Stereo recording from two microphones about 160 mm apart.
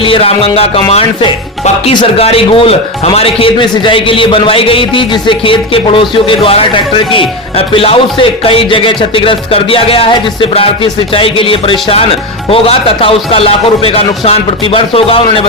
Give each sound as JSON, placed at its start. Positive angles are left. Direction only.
{"t": 0.0, "sound": "speech", "side_deg": 35}